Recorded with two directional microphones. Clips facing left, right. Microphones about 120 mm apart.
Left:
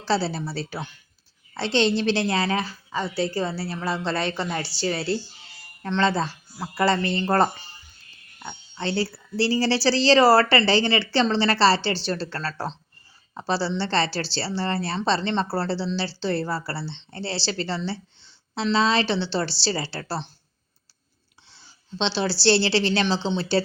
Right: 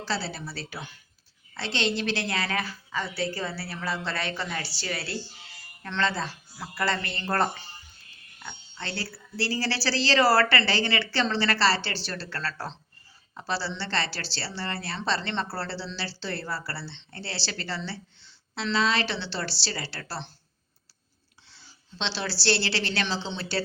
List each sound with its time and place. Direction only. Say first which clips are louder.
0.0 s a woman's voice: left 7 dB; 30° left (ahead or behind)
21.5 s a woman's voice: left 10 dB; 25° left (ahead or behind)